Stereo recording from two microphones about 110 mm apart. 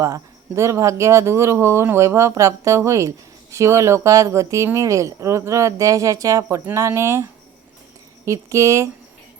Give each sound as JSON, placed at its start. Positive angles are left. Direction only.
{"t": 0.0, "sound": "speech", "side_deg": -30}